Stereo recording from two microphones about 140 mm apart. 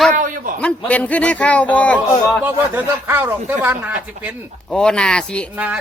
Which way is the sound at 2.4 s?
15° right (ahead or behind).